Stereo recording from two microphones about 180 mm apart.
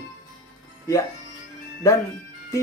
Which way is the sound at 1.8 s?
15° left (ahead or behind).